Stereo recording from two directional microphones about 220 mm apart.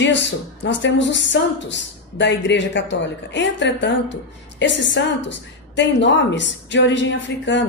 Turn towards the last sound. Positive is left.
turn(degrees=55)  # may be behind; listen again after turning